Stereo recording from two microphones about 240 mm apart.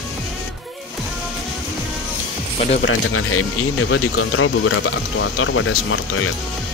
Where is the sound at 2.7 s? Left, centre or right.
Left.